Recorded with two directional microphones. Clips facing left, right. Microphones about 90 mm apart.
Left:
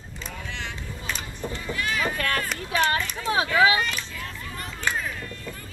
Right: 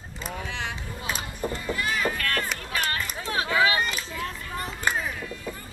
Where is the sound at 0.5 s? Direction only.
10° right (ahead or behind).